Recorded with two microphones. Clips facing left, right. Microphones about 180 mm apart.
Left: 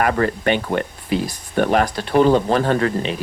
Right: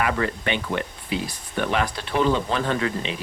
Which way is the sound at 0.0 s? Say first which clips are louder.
Left 6 dB; 45° left (ahead or behind).